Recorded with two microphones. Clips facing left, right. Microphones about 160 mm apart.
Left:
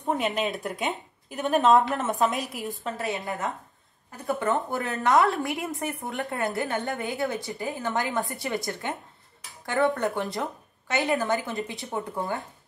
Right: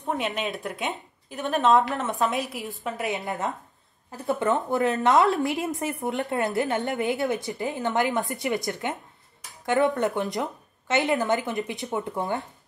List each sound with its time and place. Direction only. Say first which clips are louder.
0.0 s speech: left 2 dB; centre (ahead or behind)
3.0 s a woman's voice: right 2 dB; 20° right (ahead or behind)
9.7 s a woman's voice: right 2 dB; 20° right (ahead or behind)